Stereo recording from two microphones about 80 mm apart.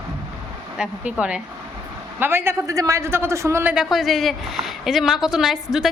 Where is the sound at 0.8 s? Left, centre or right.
Centre.